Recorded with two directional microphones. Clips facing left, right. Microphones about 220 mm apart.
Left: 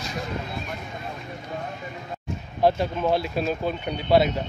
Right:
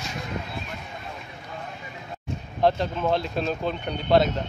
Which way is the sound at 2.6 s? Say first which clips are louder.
Left 1 dB; 10° left (ahead or behind).